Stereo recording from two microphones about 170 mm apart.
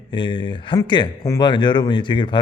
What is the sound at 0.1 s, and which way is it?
Speech, 30° left (ahead or behind).